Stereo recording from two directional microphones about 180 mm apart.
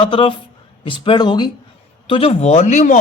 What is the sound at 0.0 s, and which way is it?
Speech, 30° left (ahead or behind).